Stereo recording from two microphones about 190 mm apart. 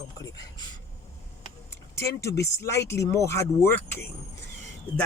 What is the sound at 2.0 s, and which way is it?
Speech, 15° left (ahead or behind).